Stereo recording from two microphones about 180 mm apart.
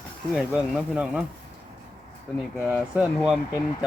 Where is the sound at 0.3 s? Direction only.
5° right (ahead or behind).